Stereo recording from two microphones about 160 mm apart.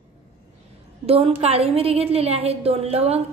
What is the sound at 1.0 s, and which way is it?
A woman's voice, 35° right (ahead or behind).